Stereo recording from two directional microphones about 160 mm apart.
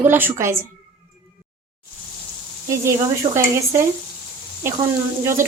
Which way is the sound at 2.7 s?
20° right (ahead or behind).